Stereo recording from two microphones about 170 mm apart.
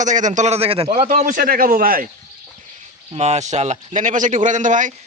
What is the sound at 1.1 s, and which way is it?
Speech, 50° right (ahead or behind).